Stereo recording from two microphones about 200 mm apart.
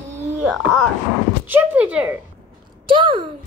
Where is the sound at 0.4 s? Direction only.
5° right (ahead or behind).